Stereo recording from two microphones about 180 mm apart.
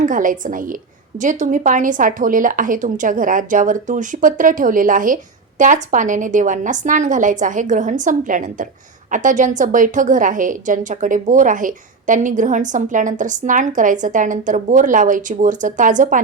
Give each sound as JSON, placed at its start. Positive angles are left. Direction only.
{"t": 0.0, "sound": "speech", "side_deg": -50}